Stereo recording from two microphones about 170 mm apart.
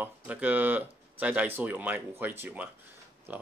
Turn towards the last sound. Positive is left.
turn(degrees=-10)  # may be behind; listen again after turning